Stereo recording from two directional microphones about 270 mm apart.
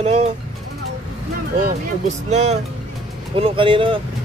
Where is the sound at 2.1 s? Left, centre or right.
Right.